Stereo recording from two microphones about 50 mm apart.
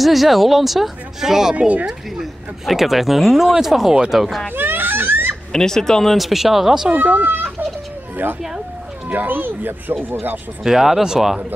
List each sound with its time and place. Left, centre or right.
0.0 s speech: centre
4.6 s baby laughter: right
5.5 s fowl: centre
6.1 s speech: centre
6.9 s speech: right
9.1 s speech: right
10.6 s speech: centre